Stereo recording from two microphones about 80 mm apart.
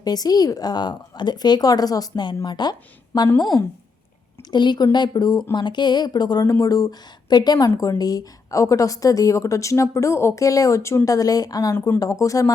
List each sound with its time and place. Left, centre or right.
0.0 s speech: left
2.2 s speech: left
4.5 s speech: left
5.5 s speech: left
6.4 s a woman's voice: left